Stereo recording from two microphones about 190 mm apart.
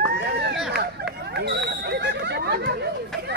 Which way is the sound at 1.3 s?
60° right (ahead or behind).